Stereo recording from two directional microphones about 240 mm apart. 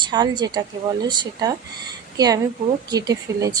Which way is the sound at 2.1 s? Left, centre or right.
Centre.